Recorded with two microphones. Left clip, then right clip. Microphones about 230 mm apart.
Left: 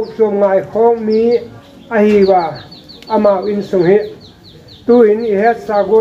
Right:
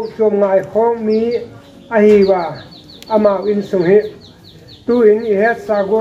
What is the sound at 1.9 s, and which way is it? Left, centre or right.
Speech, left.